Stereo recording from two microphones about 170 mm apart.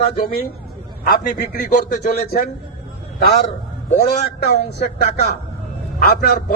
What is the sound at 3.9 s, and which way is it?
Speech, 65° left (ahead or behind).